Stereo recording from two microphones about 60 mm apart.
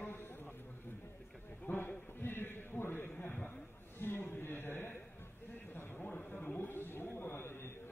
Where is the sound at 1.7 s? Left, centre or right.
Left.